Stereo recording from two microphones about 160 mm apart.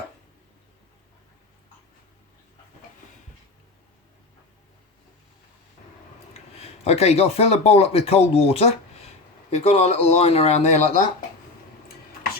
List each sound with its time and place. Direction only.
6.6 s speech: 40° left (ahead or behind)